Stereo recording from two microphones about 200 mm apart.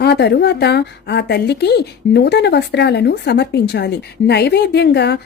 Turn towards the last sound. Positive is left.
turn(degrees=55)  # may be behind; listen again after turning